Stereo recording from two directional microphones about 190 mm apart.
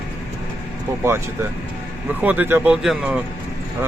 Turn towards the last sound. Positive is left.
turn(degrees=-5)  # may be behind; listen again after turning